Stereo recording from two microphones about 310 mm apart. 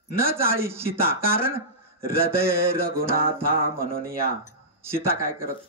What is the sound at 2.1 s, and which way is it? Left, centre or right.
Music, centre.